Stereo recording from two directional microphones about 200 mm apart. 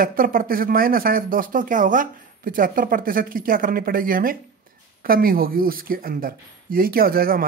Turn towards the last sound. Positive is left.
turn(degrees=-45)  # may be behind; listen again after turning